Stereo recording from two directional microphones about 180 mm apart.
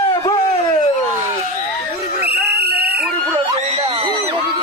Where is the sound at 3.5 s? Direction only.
35° right (ahead or behind).